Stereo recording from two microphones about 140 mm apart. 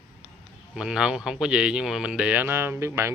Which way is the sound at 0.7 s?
5° right (ahead or behind).